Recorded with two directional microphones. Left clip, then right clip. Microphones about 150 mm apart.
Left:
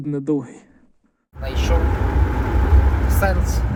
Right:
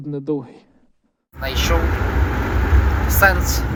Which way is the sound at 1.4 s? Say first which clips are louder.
Right 5 dB; 10° left (ahead or behind).